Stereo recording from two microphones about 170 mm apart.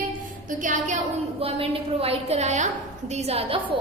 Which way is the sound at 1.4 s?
35° right (ahead or behind).